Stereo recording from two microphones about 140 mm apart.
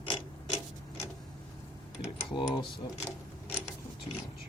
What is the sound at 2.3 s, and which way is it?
Speech, 35° left (ahead or behind).